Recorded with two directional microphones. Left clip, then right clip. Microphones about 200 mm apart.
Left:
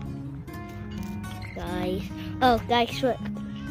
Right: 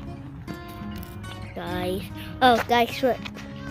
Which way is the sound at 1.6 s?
Centre (ahead or behind).